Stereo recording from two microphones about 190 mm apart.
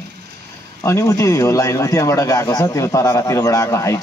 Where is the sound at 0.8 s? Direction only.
15° left (ahead or behind).